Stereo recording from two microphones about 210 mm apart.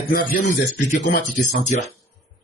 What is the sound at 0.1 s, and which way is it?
A man's voice, 45° left (ahead or behind).